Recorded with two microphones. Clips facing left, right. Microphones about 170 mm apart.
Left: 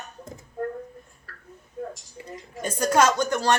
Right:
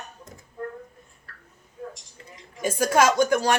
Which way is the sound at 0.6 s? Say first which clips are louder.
Left 4 dB; 45° left (ahead or behind).